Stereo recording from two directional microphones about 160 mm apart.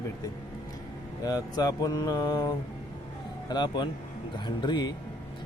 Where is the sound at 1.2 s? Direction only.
25° left (ahead or behind).